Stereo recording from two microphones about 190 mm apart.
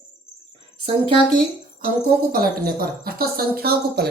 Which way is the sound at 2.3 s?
50° right (ahead or behind).